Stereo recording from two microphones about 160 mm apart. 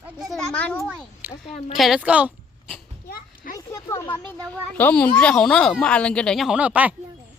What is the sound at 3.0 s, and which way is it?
Children playing, 70° left (ahead or behind).